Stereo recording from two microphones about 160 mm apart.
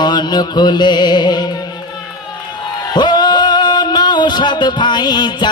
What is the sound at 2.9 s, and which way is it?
Music, 25° left (ahead or behind).